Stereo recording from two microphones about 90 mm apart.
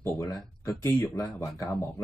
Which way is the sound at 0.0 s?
35° left (ahead or behind).